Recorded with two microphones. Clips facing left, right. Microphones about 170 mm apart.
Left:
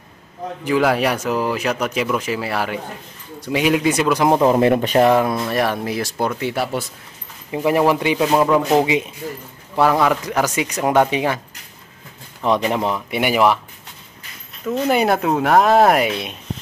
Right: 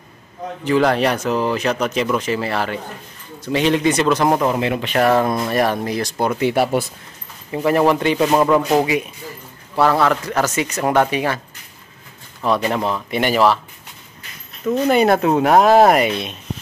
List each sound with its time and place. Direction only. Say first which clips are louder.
0.7 s speech: right 1 dB; 5° left (ahead or behind)
4.6 s speech: left 6 dB; 45° left (ahead or behind)
4.9 s a man's voice: even; 20° left (ahead or behind)
5.5 s speech: right 2 dB; centre (ahead or behind)
6.4 s speech: right 5 dB; 15° right (ahead or behind)
7.5 s speech: right 1 dB; 10° left (ahead or behind)
8.8 s a man's voice: left 1 dB; 20° left (ahead or behind)
12.4 s speech: even; 15° left (ahead or behind)
14.9 s speech: right 2 dB; 5° left (ahead or behind)